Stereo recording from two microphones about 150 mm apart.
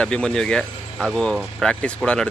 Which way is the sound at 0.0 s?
5° left (ahead or behind).